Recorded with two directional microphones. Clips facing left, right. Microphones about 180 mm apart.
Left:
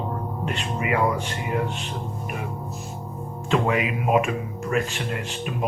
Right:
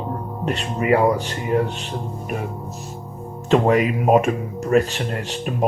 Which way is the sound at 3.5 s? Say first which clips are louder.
Right 6 dB; 40° right (ahead or behind).